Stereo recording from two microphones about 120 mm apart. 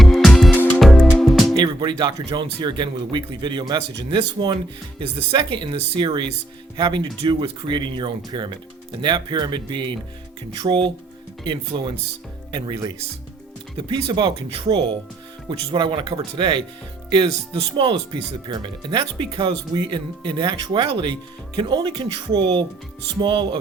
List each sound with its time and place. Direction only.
0.0 s music: centre (ahead or behind)
1.5 s speech: 40° right (ahead or behind)